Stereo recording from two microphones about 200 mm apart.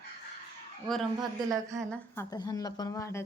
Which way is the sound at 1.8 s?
5° left (ahead or behind).